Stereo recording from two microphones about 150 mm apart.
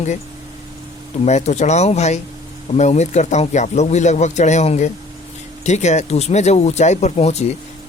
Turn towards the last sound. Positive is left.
turn(degrees=45)  # may be behind; listen again after turning